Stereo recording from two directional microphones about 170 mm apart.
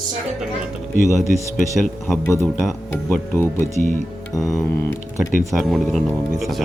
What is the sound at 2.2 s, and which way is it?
Speech, 15° left (ahead or behind).